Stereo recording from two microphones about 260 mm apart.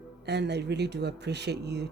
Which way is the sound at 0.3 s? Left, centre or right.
Right.